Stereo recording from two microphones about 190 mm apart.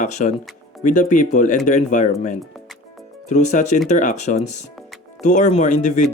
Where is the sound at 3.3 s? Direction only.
40° left (ahead or behind).